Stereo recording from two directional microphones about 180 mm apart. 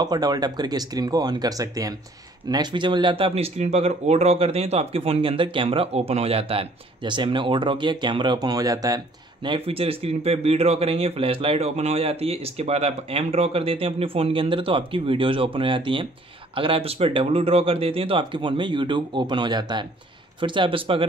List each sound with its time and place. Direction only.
0.0 s speech: 20° right (ahead or behind)